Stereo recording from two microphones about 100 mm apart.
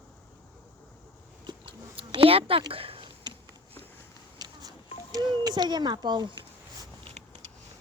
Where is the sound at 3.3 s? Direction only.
45° right (ahead or behind).